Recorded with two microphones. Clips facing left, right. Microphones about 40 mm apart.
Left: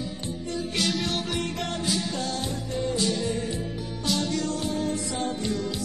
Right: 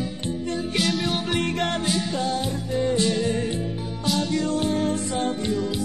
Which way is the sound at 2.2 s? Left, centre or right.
Centre.